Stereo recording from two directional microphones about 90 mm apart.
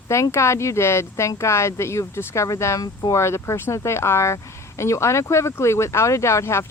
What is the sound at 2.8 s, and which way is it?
Speech, 45° left (ahead or behind).